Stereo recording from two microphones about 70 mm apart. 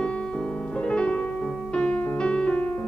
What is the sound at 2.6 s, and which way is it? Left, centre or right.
Music, left.